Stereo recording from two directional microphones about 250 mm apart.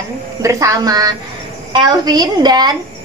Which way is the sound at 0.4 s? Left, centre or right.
Centre.